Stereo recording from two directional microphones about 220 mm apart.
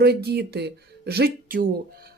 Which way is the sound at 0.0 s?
45° right (ahead or behind).